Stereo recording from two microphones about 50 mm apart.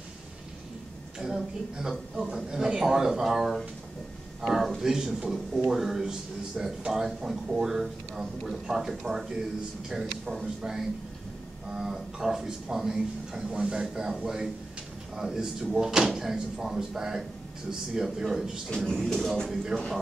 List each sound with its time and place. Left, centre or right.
1.2 s a man's voice: centre
13.5 s a man's voice: centre
18.9 s speech: centre